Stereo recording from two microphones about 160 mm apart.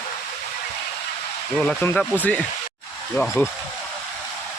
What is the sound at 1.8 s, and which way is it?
Speech, 10° left (ahead or behind).